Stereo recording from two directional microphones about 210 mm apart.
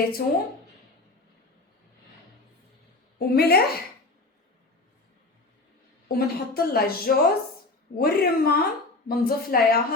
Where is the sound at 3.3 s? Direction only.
50° left (ahead or behind).